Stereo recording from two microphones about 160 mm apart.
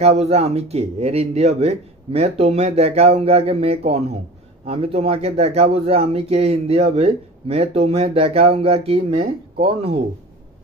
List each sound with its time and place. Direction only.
0.0 s speech: 40° right (ahead or behind)